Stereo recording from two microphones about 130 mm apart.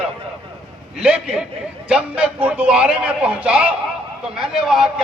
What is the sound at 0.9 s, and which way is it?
A man's voice, 5° right (ahead or behind).